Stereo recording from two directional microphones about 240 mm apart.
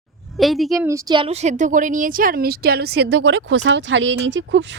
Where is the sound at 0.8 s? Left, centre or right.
Centre.